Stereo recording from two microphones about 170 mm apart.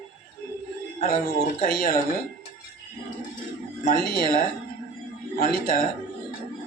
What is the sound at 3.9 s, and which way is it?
Speech, 60° left (ahead or behind).